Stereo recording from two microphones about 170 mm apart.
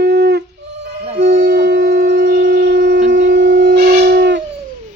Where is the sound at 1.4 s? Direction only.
75° right (ahead or behind).